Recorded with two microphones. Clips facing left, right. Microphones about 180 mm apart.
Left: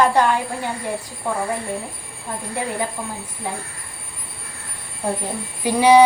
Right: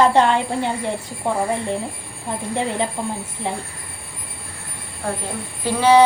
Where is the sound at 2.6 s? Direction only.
25° right (ahead or behind).